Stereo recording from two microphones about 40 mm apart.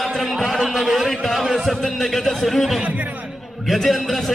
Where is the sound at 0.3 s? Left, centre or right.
Centre.